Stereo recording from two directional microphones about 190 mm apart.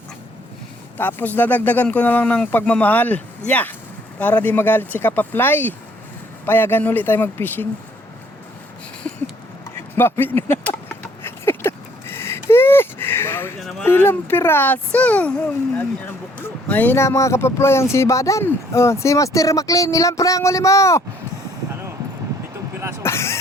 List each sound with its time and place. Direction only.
0.9 s speech: 10° left (ahead or behind)
9.0 s a sound: 5° left (ahead or behind)
13.6 s speech: centre (ahead or behind)
23.0 s speech: 15° left (ahead or behind)